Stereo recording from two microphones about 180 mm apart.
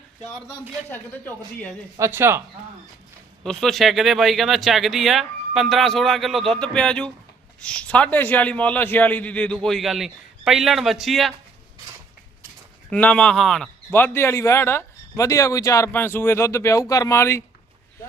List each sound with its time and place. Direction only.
0.9 s speech: 10° left (ahead or behind)
2.0 s speech: 15° right (ahead or behind)
3.4 s a man's voice: 5° left (ahead or behind)
12.9 s speech: 10° left (ahead or behind)